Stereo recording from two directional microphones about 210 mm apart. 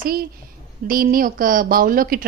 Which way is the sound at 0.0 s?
45° right (ahead or behind).